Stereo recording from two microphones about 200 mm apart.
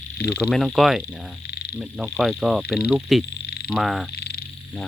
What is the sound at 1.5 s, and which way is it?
Frog, 55° left (ahead or behind).